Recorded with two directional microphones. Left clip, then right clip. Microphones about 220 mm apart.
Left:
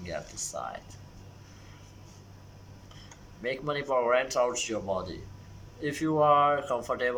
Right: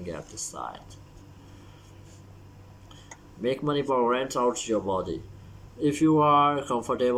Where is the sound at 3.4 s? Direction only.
10° right (ahead or behind).